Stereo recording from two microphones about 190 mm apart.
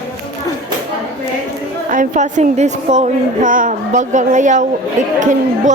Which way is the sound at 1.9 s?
45° right (ahead or behind).